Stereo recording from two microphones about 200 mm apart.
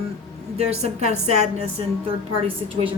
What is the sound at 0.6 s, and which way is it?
A woman's voice, 30° right (ahead or behind).